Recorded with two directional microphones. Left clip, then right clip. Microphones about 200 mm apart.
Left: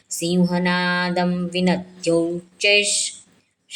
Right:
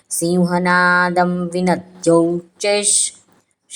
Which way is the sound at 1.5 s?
Centre (ahead or behind).